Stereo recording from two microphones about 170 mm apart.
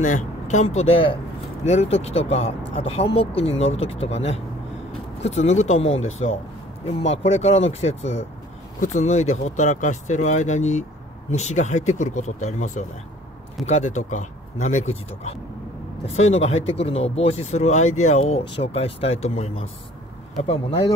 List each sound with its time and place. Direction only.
0.0 s speech: 45° left (ahead or behind)